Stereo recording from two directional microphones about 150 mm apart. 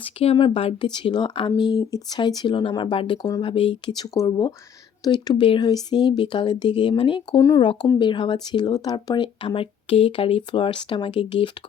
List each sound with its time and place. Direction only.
0.0 s speech: 40° left (ahead or behind)